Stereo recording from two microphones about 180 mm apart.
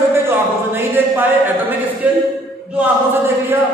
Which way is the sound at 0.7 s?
10° right (ahead or behind).